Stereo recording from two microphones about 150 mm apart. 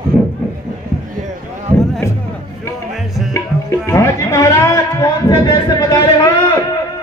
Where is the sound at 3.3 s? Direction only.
20° left (ahead or behind).